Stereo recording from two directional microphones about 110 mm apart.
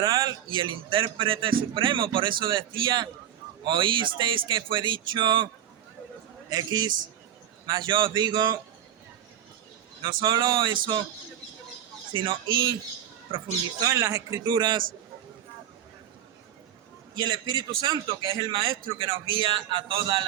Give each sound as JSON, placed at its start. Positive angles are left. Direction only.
{"t": 0.0, "sound": "a man's voice", "side_deg": -40}
{"t": 6.5, "sound": "a man's voice", "side_deg": -35}
{"t": 10.0, "sound": "a man's voice", "side_deg": -45}
{"t": 12.1, "sound": "a man's voice", "side_deg": -45}
{"t": 13.7, "sound": "speech", "side_deg": -30}
{"t": 14.4, "sound": "a man's voice", "side_deg": -40}
{"t": 17.2, "sound": "a man's voice", "side_deg": -40}